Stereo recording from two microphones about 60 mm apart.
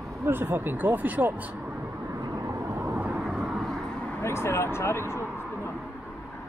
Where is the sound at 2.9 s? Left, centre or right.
Right.